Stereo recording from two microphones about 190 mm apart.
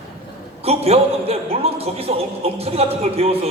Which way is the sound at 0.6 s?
30° right (ahead or behind).